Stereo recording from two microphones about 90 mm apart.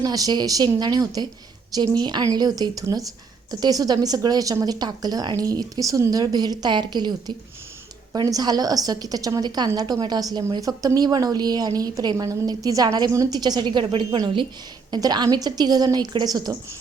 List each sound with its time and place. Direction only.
0.0 s a woman's voice: 45° right (ahead or behind); by 14.2 s 70° right (ahead or behind)
14.8 s a woman's voice: 50° right (ahead or behind)